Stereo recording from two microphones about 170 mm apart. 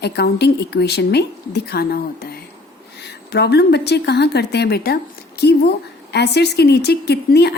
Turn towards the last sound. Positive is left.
turn(degrees=70)  # may be behind; listen again after turning